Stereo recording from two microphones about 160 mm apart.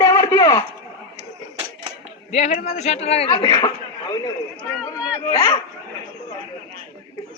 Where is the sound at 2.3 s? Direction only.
45° left (ahead or behind).